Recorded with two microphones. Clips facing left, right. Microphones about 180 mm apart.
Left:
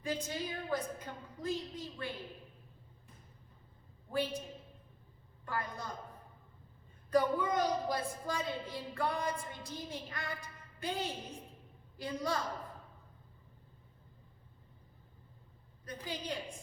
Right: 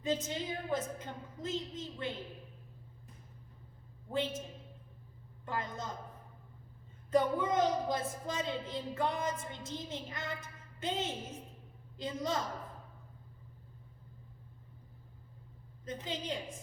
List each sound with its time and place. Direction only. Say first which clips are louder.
0.0 s a woman's voice: right 3 dB; 20° right (ahead or behind)
4.1 s a woman's voice: even; 20° right (ahead or behind)
5.5 s a woman's voice: right 1 dB; 20° right (ahead or behind)
7.1 s a woman's voice: right 1 dB; 20° right (ahead or behind)
15.8 s a woman's voice: right 2 dB; 20° right (ahead or behind)